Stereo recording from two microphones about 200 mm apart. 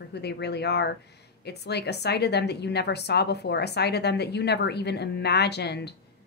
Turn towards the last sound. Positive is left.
turn(degrees=55)  # may be behind; listen again after turning